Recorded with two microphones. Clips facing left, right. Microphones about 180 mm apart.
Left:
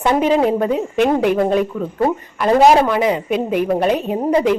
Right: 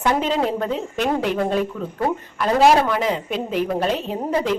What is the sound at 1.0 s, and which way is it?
Speech, 55° left (ahead or behind).